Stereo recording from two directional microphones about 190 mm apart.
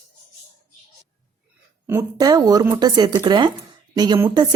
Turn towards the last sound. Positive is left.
turn(degrees=-20)  # may be behind; listen again after turning